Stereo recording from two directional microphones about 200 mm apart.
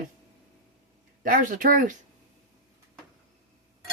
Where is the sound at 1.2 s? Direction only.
45° right (ahead or behind).